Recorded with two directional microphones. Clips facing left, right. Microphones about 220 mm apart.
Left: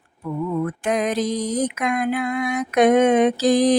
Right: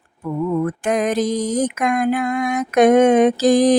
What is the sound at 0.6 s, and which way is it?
Music, 45° right (ahead or behind).